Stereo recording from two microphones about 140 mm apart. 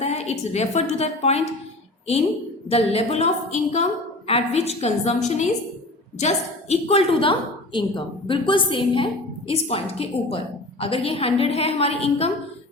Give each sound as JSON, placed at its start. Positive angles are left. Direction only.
{"t": 0.0, "sound": "a woman's voice", "side_deg": 50}
{"t": 2.6, "sound": "a woman's voice", "side_deg": 45}